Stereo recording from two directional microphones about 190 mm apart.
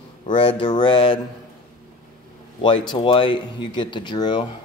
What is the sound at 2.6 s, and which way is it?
Speech, 25° left (ahead or behind).